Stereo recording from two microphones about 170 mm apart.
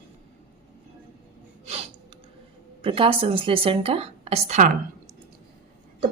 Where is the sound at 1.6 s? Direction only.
40° right (ahead or behind).